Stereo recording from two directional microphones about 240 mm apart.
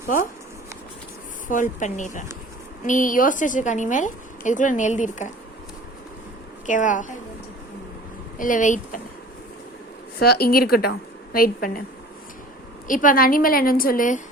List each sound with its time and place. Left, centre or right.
1.5 s a woman's voice: left
6.7 s a woman's voice: left
8.4 s a woman's voice: left
10.2 s a woman's voice: left
12.9 s a woman's voice: left